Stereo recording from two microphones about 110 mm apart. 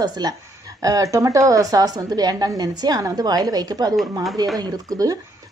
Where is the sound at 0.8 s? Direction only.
30° right (ahead or behind).